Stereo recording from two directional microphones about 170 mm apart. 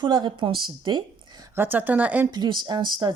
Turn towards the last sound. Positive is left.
turn(degrees=-25)  # may be behind; listen again after turning